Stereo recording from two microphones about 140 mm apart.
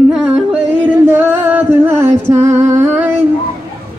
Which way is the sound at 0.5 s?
10° right (ahead or behind).